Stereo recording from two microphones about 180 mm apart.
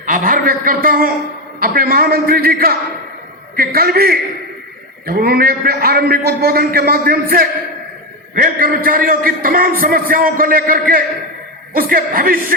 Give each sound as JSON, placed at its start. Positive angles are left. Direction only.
{"t": 0.0, "sound": "a man's voice", "side_deg": -50}